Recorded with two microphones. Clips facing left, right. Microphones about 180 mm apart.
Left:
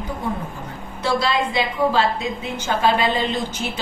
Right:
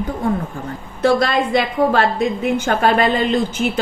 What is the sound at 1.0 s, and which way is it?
A woman's voice, 55° right (ahead or behind).